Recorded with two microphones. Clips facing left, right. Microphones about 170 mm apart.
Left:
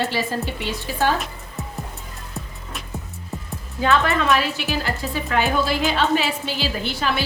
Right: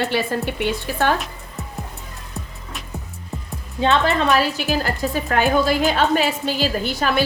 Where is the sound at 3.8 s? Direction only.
30° right (ahead or behind).